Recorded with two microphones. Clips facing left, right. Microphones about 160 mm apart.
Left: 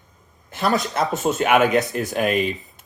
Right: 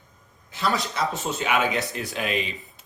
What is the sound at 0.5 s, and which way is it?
Speech, 55° left (ahead or behind).